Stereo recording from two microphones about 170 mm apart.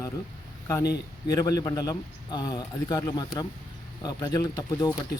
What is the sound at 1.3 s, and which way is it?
Speech, 20° left (ahead or behind).